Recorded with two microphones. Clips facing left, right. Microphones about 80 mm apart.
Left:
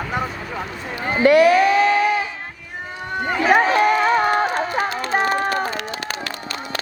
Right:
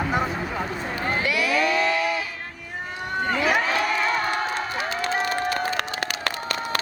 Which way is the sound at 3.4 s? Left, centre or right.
Left.